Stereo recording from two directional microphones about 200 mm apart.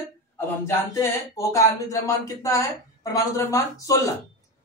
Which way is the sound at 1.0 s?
15° left (ahead or behind).